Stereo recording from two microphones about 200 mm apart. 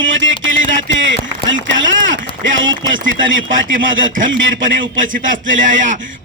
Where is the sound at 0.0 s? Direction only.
70° right (ahead or behind).